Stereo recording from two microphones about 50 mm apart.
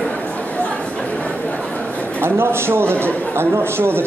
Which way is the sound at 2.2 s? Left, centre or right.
Right.